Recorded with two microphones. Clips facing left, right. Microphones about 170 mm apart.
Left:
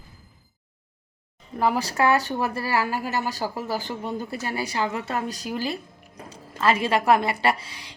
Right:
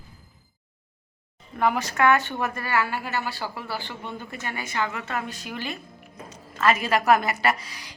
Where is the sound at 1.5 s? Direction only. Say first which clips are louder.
Left 1 dB; 35° left (ahead or behind).